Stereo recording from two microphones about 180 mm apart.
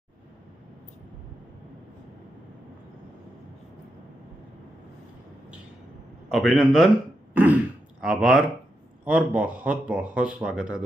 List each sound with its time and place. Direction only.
6.3 s a man's voice: centre (ahead or behind)